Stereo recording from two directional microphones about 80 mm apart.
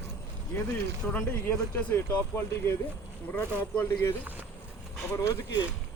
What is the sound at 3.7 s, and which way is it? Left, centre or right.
Speech, left.